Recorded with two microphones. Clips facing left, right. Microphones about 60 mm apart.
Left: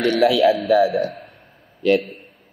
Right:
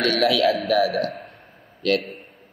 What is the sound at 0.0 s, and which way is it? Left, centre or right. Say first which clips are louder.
Speech: left 4 dB; centre.